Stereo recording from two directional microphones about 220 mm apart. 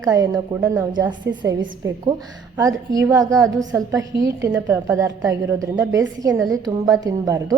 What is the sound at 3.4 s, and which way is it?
Speech, centre (ahead or behind).